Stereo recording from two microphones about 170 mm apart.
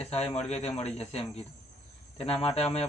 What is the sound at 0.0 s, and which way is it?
Speech, 40° left (ahead or behind).